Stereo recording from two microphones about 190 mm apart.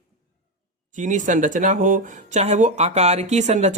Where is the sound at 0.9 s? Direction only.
40° right (ahead or behind).